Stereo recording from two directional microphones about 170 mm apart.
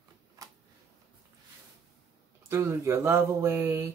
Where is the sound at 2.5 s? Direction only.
15° right (ahead or behind).